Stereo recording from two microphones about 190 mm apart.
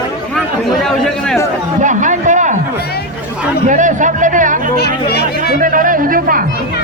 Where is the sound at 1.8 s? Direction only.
40° right (ahead or behind).